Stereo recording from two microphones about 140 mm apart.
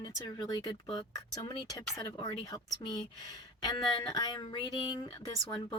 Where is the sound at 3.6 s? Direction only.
30° left (ahead or behind).